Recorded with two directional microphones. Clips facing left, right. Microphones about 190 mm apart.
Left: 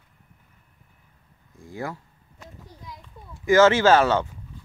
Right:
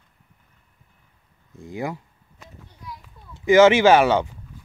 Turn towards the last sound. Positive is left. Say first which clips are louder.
# right 2 dB
turn(degrees=-15)  # may be behind; listen again after turning